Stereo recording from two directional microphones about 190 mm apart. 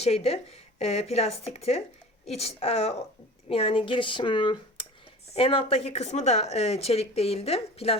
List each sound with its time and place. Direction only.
0.0 s speech: 30° left (ahead or behind)